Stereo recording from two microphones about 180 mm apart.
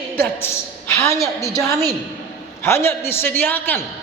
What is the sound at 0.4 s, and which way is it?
A woman's voice, 15° left (ahead or behind).